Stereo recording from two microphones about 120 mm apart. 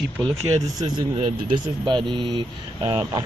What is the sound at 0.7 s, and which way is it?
Speech, 35° right (ahead or behind).